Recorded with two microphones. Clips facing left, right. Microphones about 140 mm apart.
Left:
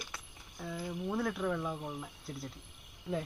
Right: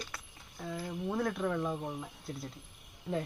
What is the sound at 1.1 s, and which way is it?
Speech, centre (ahead or behind).